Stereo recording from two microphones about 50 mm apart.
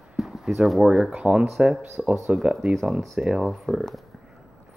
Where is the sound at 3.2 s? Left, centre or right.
Centre.